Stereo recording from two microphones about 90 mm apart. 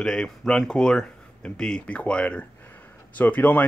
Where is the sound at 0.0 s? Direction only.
5° left (ahead or behind).